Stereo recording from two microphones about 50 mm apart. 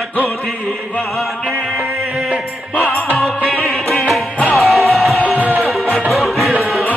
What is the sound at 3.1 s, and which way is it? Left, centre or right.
Music, centre.